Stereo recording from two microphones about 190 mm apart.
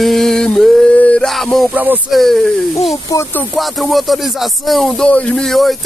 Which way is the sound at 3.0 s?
15° left (ahead or behind).